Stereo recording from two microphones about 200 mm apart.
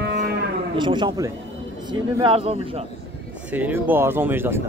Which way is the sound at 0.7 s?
25° right (ahead or behind).